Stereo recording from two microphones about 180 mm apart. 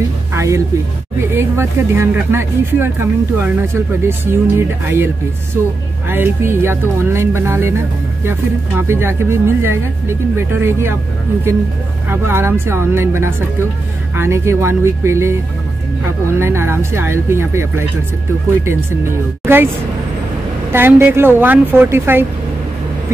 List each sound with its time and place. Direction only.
0.3 s music: 15° right (ahead or behind)
1.3 s speech: 15° right (ahead or behind)
12.1 s speech: 15° right (ahead or behind)
19.4 s speech: 15° right (ahead or behind)
20.7 s speech: 10° right (ahead or behind)